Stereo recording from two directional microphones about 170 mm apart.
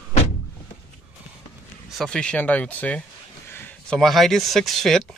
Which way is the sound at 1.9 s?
5° left (ahead or behind).